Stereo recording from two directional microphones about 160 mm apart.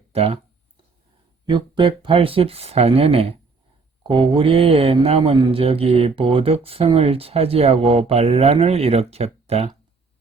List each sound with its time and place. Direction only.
0.1 s speech: 40° right (ahead or behind)
1.5 s speech: 30° right (ahead or behind)